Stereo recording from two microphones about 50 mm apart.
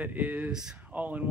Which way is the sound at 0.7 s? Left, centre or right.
Right.